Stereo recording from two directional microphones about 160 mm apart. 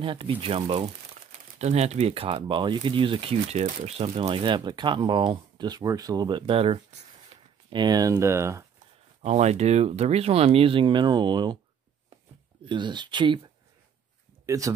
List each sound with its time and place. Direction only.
0.0 s speech: 35° right (ahead or behind)
1.6 s speech: 45° right (ahead or behind)
7.7 s speech: 25° right (ahead or behind)
9.2 s speech: 45° right (ahead or behind); by 11.5 s 30° right (ahead or behind)
12.6 s speech: 30° right (ahead or behind)
14.4 s a sound: 20° right (ahead or behind)